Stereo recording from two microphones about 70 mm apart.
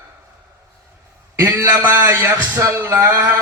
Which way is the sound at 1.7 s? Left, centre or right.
Right.